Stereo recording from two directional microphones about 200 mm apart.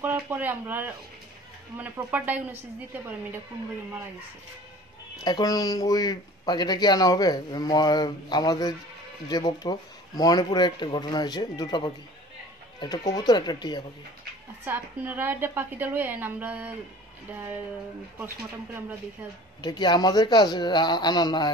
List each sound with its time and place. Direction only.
0.0 s a woman's voice: 10° right (ahead or behind)
5.2 s speech: 20° left (ahead or behind)
14.6 s a woman's voice: 10° right (ahead or behind)
19.6 s speech: 20° left (ahead or behind)